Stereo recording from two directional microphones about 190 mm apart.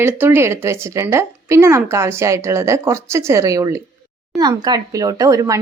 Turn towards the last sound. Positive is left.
turn(degrees=-20)  # may be behind; listen again after turning